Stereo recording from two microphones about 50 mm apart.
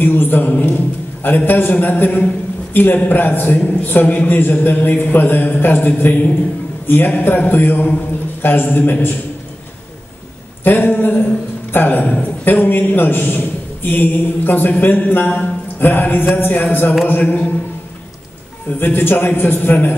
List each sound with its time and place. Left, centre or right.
0.0 s a man's voice: left
10.6 s a man's voice: left
17.2 s a man's voice: left
18.7 s a man's voice: left